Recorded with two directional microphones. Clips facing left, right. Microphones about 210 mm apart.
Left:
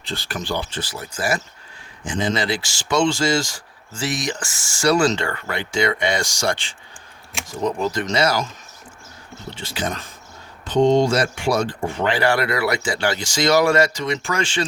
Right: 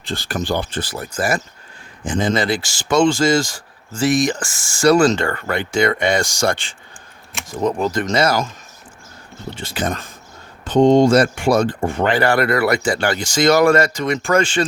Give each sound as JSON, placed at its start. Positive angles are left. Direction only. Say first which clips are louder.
{"t": 0.0, "sound": "speech", "louder": "right 5 dB", "side_deg": -45}
{"t": 9.6, "sound": "speech", "louder": "right 3 dB", "side_deg": -50}